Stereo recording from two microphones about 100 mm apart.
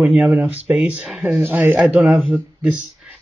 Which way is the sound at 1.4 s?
20° right (ahead or behind).